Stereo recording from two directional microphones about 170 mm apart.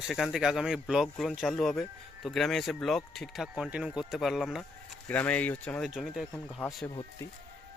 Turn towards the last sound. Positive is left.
turn(degrees=25)  # may be behind; listen again after turning